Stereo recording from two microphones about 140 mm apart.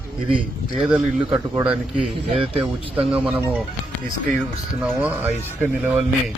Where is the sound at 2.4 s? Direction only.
40° right (ahead or behind).